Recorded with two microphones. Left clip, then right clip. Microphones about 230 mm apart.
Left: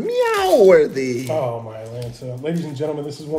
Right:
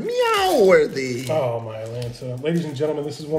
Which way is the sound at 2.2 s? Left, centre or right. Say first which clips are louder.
Right 1 dB; right.